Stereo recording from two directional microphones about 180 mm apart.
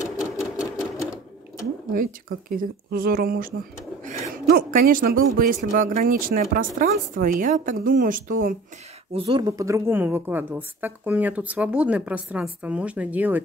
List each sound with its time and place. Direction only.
0.2 s sewing machine: 5° right (ahead or behind)
2.5 s speech: 55° right (ahead or behind)
9.1 s speech: 30° right (ahead or behind); by 13.4 s 10° right (ahead or behind)